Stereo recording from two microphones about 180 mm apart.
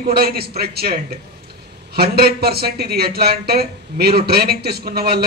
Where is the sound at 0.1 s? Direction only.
60° right (ahead or behind).